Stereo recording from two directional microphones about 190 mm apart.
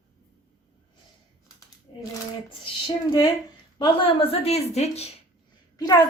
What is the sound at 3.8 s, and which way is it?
A woman's voice, 25° left (ahead or behind).